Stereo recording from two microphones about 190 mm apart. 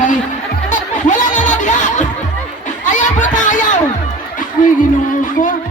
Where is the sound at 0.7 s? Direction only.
40° left (ahead or behind).